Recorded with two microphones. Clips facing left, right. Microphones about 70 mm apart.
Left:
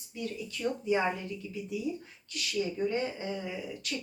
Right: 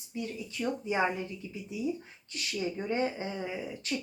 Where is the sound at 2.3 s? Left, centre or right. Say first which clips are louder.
Left 2 dB; right.